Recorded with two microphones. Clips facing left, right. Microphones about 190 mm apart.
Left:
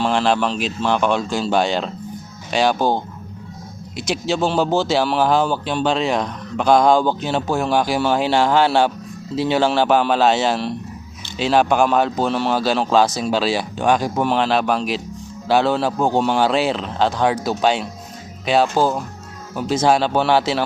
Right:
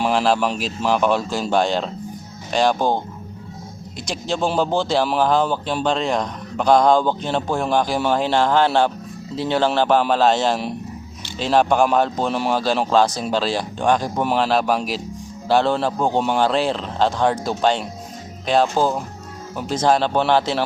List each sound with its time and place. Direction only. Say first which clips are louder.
0.0 s speech: even; 5° right (ahead or behind)
4.0 s speech: left 3 dB; 5° left (ahead or behind)